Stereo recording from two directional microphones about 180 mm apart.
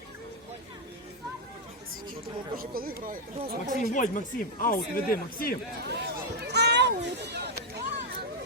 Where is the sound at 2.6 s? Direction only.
55° right (ahead or behind).